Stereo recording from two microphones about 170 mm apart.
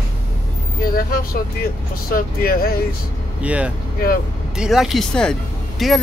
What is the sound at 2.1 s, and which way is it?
Speech, 60° left (ahead or behind).